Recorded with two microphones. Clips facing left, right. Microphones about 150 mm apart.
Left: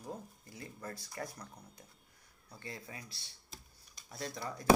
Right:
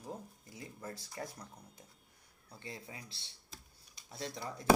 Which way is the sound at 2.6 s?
20° right (ahead or behind).